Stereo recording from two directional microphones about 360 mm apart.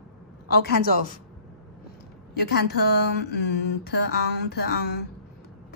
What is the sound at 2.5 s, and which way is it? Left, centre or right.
A woman's voice, left.